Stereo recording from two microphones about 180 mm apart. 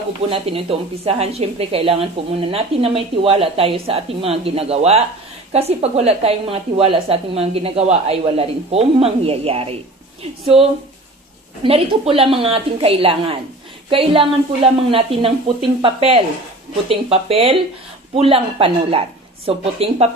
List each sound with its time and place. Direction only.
0.3 s a woman's voice: 35° right (ahead or behind)